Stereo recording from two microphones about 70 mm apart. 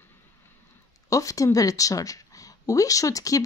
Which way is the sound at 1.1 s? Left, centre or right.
Left.